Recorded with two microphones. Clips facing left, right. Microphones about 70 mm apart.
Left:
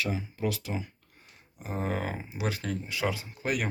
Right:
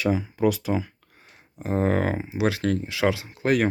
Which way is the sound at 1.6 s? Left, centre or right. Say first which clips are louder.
Right 9 dB; right.